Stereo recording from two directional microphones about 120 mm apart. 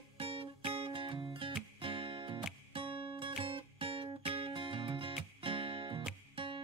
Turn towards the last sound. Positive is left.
turn(degrees=-50)  # may be behind; listen again after turning